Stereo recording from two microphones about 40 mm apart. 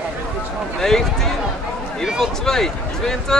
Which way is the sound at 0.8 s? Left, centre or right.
Centre.